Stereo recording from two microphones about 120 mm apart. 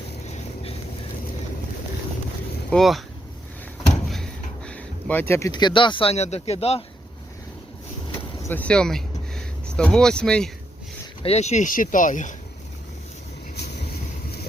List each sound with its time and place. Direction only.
2.6 s speech: centre (ahead or behind)
4.1 s a sound: 5° left (ahead or behind)
5.4 s speech: 35° left (ahead or behind); by 6.8 s 60° left (ahead or behind)
8.4 s speech: 10° left (ahead or behind)
11.2 s speech: 60° left (ahead or behind); by 12.3 s 90° left